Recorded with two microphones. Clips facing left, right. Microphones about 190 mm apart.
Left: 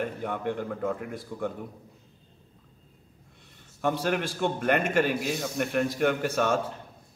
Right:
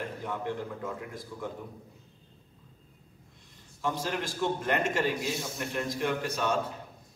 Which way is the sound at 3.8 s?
60° left (ahead or behind).